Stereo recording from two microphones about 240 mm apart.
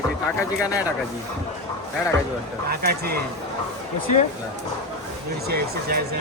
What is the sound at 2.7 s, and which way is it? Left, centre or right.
Speech, right.